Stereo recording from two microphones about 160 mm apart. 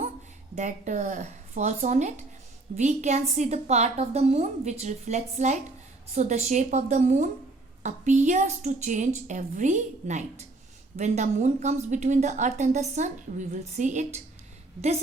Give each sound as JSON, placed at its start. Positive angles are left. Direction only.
{"t": 0.5, "sound": "a woman's voice", "side_deg": -50}